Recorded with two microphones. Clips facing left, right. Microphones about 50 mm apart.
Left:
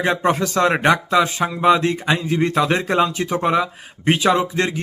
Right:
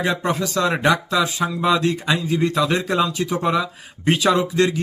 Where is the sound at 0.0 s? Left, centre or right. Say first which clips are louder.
Left 3 dB; left.